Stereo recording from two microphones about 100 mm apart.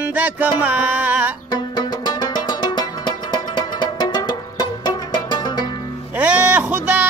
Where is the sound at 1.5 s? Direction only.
45° left (ahead or behind).